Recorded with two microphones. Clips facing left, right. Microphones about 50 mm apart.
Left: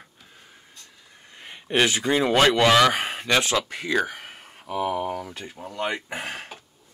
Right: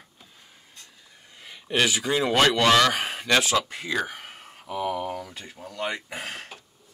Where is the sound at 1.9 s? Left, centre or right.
Left.